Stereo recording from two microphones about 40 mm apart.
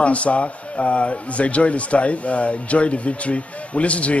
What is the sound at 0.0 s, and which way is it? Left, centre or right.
Speech, left.